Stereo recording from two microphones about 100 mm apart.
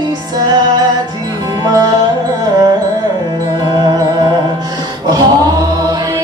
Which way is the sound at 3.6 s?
45° right (ahead or behind).